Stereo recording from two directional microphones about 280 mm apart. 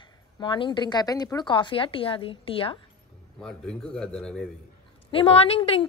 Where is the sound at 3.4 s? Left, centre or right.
Centre.